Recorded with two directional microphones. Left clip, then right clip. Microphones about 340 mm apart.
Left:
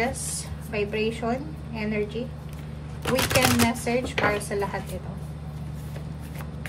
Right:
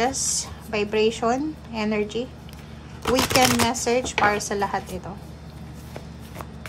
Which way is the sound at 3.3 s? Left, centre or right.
Centre.